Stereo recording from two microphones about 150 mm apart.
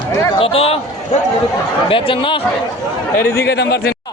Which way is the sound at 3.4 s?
90° left.